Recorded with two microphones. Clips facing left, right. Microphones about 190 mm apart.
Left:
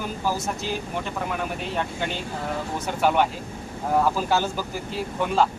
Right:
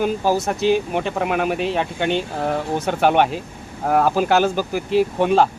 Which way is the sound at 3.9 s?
85° right.